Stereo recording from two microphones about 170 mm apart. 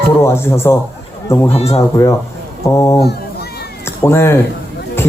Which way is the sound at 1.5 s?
35° left (ahead or behind).